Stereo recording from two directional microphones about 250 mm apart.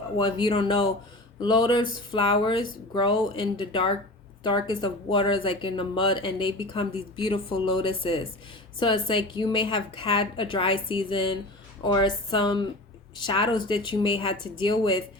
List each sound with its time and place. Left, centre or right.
0.2 s a woman's voice: centre